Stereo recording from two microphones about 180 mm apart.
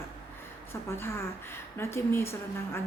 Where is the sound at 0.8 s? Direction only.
15° left (ahead or behind).